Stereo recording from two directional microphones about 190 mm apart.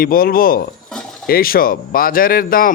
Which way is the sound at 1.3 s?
50° left (ahead or behind).